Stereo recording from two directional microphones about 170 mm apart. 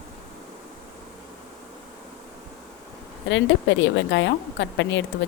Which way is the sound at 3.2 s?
90° left.